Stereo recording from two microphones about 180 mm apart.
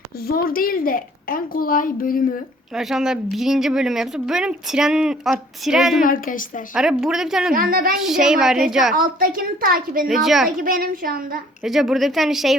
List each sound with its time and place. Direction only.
0.3 s a child's voice: 55° left (ahead or behind)
2.7 s speech: centre (ahead or behind)
6.0 s a child's voice: 50° left (ahead or behind)
6.7 s speech: 5° right (ahead or behind)
7.5 s a woman's voice: 55° right (ahead or behind)
7.9 s speech: centre (ahead or behind)
9.0 s a woman's voice: 50° right (ahead or behind)
10.1 s speech: centre (ahead or behind)
10.6 s a woman's voice: 50° right (ahead or behind)
11.6 s speech: centre (ahead or behind)